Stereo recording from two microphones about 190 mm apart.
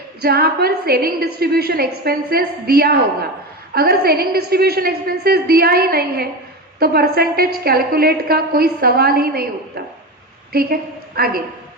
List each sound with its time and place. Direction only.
0.2 s a woman's voice: 55° right (ahead or behind)
10.5 s a woman's voice: 50° right (ahead or behind)